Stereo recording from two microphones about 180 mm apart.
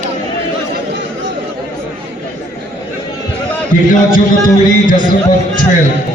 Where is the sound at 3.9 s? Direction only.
45° left (ahead or behind).